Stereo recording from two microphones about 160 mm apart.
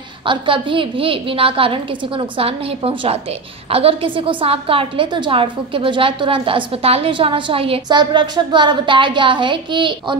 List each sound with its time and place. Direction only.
0.2 s a woman's voice: 30° right (ahead or behind)